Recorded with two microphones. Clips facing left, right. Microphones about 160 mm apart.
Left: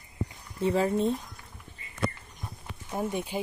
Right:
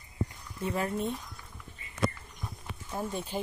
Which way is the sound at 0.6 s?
25° left (ahead or behind).